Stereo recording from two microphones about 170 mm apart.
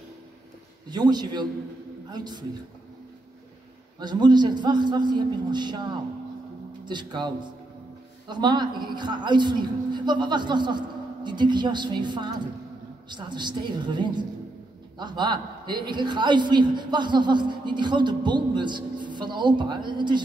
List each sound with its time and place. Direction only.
0.8 s a woman's voice: 25° right (ahead or behind)
4.0 s a woman's voice: 25° right (ahead or behind)